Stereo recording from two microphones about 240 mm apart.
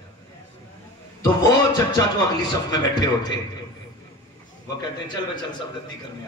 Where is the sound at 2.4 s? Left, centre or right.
Centre.